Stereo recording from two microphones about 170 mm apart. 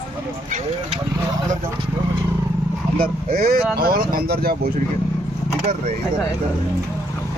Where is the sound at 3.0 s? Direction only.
60° right (ahead or behind).